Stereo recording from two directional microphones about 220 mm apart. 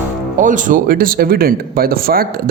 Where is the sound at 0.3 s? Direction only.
35° right (ahead or behind).